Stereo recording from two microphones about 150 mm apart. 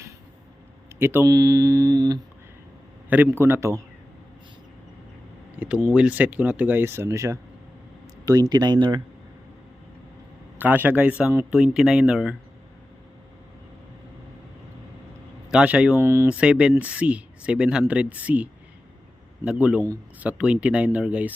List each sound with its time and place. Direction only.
0.9 s speech: 15° right (ahead or behind)
3.1 s speech: 15° right (ahead or behind)
5.5 s speech: 10° right (ahead or behind); by 9.0 s 30° right (ahead or behind)
10.6 s speech: 10° right (ahead or behind)
15.4 s speech: 5° right (ahead or behind)
19.5 s speech: 10° right (ahead or behind)